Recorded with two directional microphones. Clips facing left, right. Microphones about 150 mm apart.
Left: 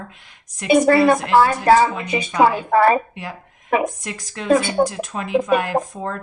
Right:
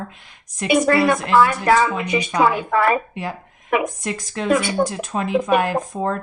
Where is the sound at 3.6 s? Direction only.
35° left (ahead or behind).